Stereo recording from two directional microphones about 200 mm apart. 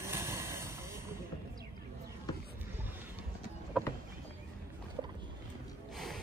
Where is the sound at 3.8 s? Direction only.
5° right (ahead or behind).